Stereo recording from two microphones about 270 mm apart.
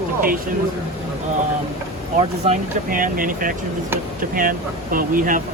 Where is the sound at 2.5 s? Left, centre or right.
Right.